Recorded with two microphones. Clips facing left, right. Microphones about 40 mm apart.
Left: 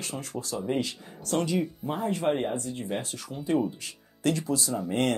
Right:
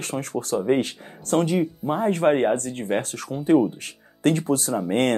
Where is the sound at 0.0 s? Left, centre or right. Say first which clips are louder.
Right 7 dB; right.